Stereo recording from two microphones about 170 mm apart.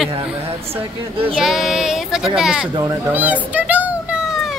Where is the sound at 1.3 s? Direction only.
Centre (ahead or behind).